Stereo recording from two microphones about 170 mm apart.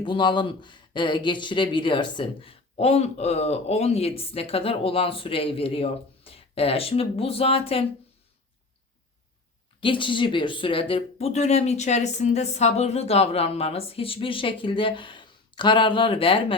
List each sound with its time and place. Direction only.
0.0 s speech: 30° left (ahead or behind)
9.8 s speech: 30° left (ahead or behind)